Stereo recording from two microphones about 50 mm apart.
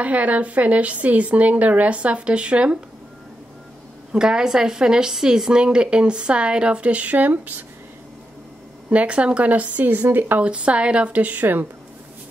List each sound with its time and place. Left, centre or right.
0.0 s a woman's voice: right
4.1 s a woman's voice: centre; by 7.6 s right
8.9 s speech: right
10.4 s a woman's voice: right